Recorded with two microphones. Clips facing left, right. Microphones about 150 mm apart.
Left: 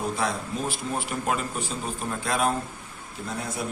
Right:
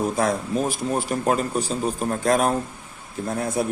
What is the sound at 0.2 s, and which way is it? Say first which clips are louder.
A man's voice: right 6 dB; 45° right (ahead or behind).